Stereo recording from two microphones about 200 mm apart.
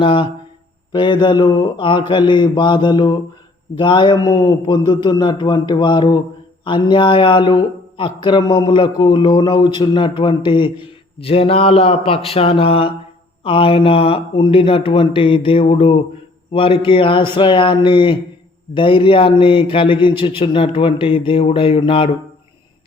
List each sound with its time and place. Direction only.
0.0 s a man's voice: 25° left (ahead or behind)